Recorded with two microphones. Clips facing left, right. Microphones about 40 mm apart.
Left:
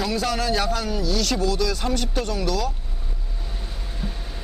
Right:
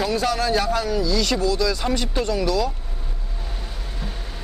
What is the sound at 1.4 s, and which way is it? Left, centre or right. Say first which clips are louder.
Speech: right 2 dB; left.